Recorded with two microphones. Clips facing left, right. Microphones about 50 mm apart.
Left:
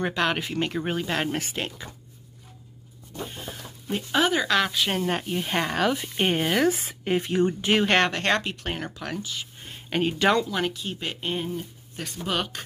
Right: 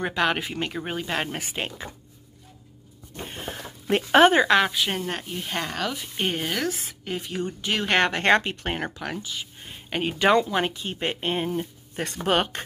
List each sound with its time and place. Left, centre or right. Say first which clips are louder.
0.0 s speech: right 1 dB; centre
3.3 s a sound: right 3 dB; right
3.9 s speech: right 7 dB; right
4.4 s speech: right 4 dB; centre
4.7 s speech: left 1 dB; centre
5.4 s speech: left 4 dB; centre
6.7 s a woman's voice: left 6 dB; left
8.0 s speech: right 3 dB; centre
10.1 s speech: right 4 dB; centre
12.0 s speech: right 4 dB; right
12.3 s speech: right 5 dB; right